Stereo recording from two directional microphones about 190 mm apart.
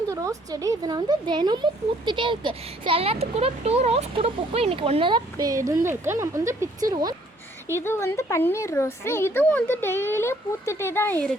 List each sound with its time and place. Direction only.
0.1 s speech: 20° right (ahead or behind)
7.8 s speech: 15° left (ahead or behind)